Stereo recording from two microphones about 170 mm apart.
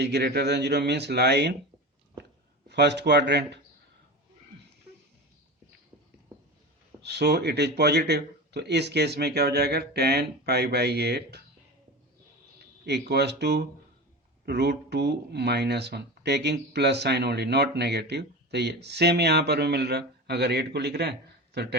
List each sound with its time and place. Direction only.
0.0 s speech: 75° right (ahead or behind)
2.6 s speech: 80° right
7.0 s speech: 80° right
12.8 s speech: 70° right (ahead or behind)